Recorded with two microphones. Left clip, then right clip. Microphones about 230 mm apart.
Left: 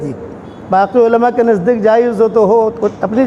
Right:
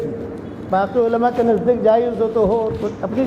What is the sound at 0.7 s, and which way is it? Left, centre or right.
A man's voice, left.